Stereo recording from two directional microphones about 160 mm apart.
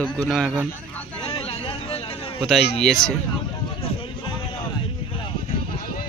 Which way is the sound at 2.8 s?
5° left (ahead or behind).